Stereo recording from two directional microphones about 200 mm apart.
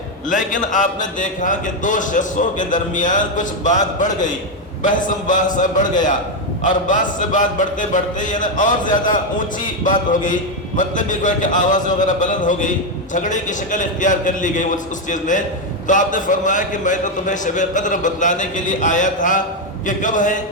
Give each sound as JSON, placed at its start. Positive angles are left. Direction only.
{"t": 0.3, "sound": "speech", "side_deg": 40}